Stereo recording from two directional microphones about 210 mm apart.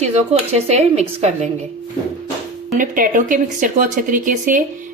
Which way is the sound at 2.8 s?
40° right (ahead or behind).